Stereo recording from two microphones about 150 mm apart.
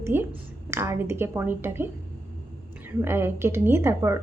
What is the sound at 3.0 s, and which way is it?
Speech, 15° right (ahead or behind).